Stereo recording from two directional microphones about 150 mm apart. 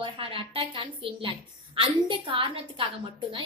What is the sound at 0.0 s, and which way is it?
A woman's voice, 35° right (ahead or behind).